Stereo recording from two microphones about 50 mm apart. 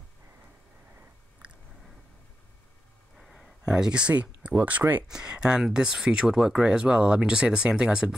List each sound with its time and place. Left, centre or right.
3.2 s a sound: centre
3.6 s speech: centre
4.1 s speech: right
5.0 s speech: centre